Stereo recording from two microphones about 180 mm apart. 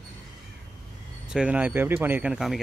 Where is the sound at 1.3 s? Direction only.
5° right (ahead or behind).